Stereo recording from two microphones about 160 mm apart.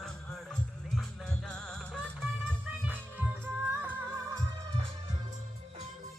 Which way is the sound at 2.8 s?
10° right (ahead or behind).